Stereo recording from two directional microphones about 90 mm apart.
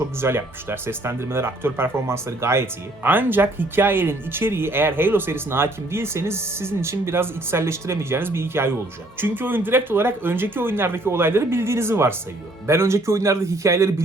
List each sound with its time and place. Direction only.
0.2 s speech: 25° right (ahead or behind)